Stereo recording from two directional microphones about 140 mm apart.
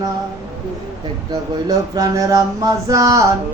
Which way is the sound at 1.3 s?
25° right (ahead or behind).